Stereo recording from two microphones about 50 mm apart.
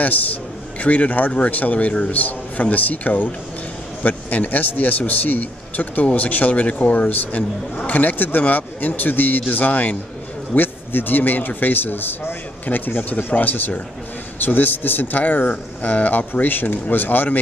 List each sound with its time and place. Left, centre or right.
0.0 s a man's voice: left